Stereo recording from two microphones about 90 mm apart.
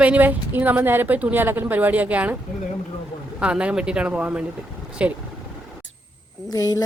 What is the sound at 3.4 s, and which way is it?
Speech, 10° right (ahead or behind).